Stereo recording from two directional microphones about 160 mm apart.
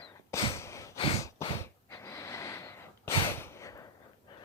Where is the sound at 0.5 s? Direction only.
20° left (ahead or behind).